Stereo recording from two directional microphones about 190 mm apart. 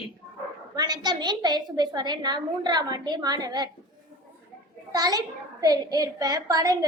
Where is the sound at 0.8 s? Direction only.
20° right (ahead or behind).